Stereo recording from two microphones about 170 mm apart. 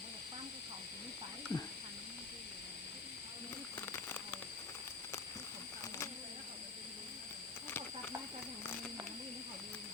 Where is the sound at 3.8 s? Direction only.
10° left (ahead or behind).